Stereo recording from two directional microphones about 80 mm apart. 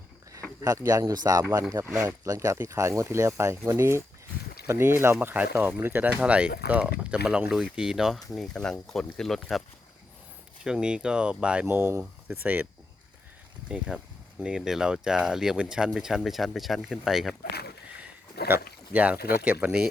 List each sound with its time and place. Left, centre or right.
0.6 s speech: right
2.0 s speech: right; by 9.6 s centre
10.6 s speech: centre
11.6 s speech: right
14.4 s speech: centre
18.4 s speech: right